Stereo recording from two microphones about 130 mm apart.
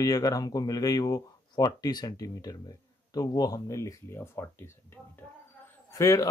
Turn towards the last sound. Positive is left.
turn(degrees=25)  # may be behind; listen again after turning